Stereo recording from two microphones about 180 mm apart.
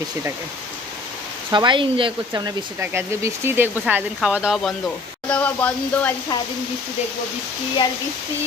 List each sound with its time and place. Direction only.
1.5 s speech: 25° right (ahead or behind)
2.3 s speech: 15° right (ahead or behind); by 6.1 s 10° left (ahead or behind)